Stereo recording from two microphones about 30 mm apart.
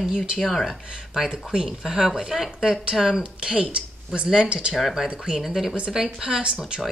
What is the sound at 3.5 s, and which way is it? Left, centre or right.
Speech, right.